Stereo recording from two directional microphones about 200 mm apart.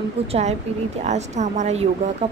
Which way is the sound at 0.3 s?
35° right (ahead or behind).